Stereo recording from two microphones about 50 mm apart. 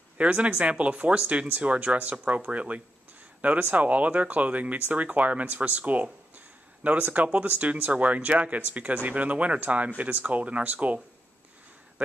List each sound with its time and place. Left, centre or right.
0.2 s speech: right
6.3 s a sound: right
7.3 s speech: right